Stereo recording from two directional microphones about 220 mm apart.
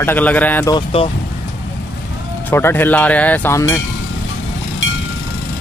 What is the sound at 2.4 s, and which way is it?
Speech, 10° left (ahead or behind).